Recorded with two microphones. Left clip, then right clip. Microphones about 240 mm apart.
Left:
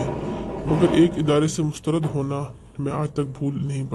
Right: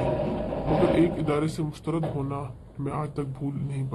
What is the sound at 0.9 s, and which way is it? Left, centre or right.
A man's voice, left.